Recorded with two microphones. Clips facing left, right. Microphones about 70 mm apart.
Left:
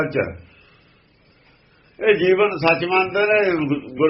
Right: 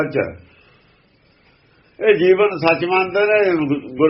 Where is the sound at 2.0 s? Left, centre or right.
Centre.